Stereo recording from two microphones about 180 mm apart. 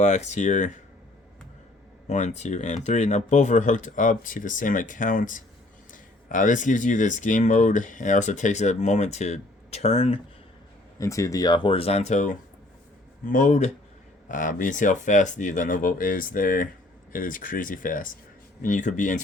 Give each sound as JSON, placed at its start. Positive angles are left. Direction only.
{"t": 0.0, "sound": "speech", "side_deg": 40}
{"t": 2.0, "sound": "speech", "side_deg": 40}
{"t": 10.9, "sound": "speech", "side_deg": 15}